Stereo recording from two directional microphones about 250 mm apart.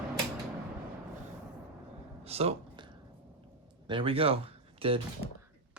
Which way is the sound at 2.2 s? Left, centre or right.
Right.